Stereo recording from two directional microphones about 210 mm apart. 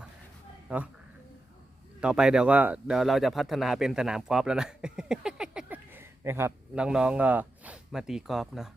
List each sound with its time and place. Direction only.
0.7 s speech: 5° right (ahead or behind)
2.0 s speech: 5° right (ahead or behind)